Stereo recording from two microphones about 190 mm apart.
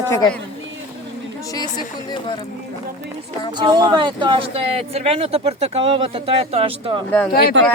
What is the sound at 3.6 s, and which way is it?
Speech, 20° right (ahead or behind).